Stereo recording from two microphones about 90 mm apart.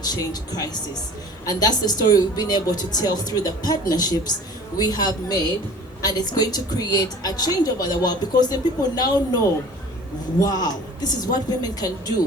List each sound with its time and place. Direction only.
0.1 s a woman's voice: 50° left (ahead or behind)
10.4 s a woman's voice: 45° left (ahead or behind)